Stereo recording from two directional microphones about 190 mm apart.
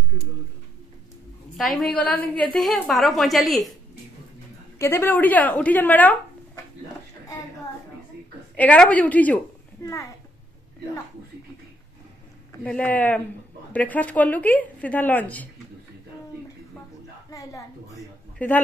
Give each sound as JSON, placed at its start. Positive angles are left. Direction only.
{"t": 1.6, "sound": "a woman's voice", "side_deg": 5}
{"t": 4.7, "sound": "speech", "side_deg": 15}
{"t": 8.5, "sound": "a woman's voice", "side_deg": 5}
{"t": 9.8, "sound": "a sound", "side_deg": 15}
{"t": 12.6, "sound": "a woman's voice", "side_deg": 10}
{"t": 17.3, "sound": "a sound", "side_deg": 15}
{"t": 18.4, "sound": "a woman's voice", "side_deg": 10}